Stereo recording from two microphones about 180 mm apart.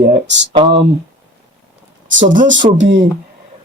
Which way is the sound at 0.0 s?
70° right (ahead or behind).